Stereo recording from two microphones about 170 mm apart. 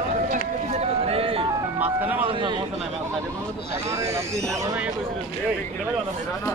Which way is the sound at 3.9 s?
15° right (ahead or behind).